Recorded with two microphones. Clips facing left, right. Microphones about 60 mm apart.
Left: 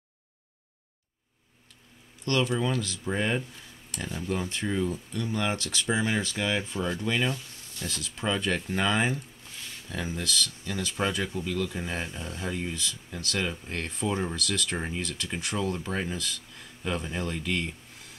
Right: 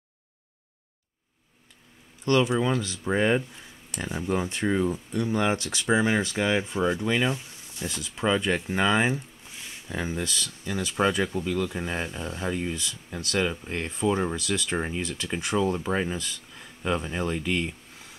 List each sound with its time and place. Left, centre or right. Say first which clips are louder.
2.2 s speech: right 4 dB; centre